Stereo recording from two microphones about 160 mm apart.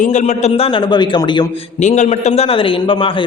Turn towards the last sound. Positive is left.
turn(degrees=30)  # may be behind; listen again after turning